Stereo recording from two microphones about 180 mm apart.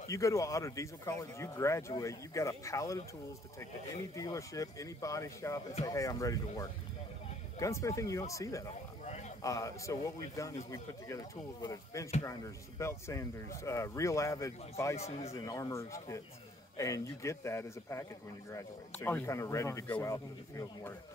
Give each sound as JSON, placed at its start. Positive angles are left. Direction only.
{"t": 0.1, "sound": "speech", "side_deg": 15}
{"t": 4.1, "sound": "speech", "side_deg": 20}
{"t": 15.0, "sound": "speech", "side_deg": 35}
{"t": 15.3, "sound": "speech", "side_deg": 20}